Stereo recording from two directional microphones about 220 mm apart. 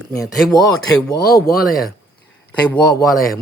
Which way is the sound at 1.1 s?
45° left (ahead or behind).